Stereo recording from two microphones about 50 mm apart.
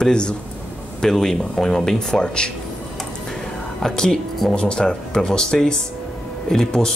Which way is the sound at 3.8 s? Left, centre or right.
Centre.